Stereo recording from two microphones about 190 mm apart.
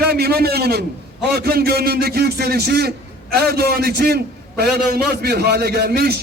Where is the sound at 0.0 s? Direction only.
55° right (ahead or behind).